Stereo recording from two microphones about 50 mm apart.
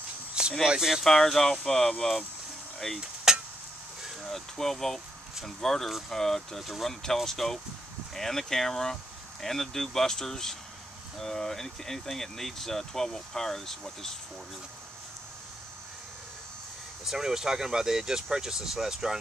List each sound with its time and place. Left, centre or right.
0.3 s a sound: centre
0.7 s speech: centre
1.1 s speech: centre
3.3 s a sound: centre
4.0 s speech: centre
17.0 s speech: centre